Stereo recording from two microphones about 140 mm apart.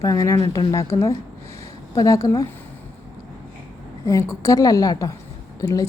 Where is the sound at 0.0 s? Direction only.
25° left (ahead or behind).